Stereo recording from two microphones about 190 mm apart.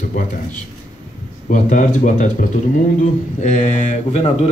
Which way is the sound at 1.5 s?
40° left (ahead or behind).